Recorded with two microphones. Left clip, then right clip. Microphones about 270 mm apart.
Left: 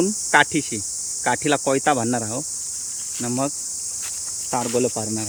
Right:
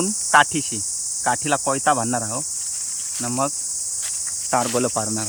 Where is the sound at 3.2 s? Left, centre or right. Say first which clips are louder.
Right 1 dB; centre.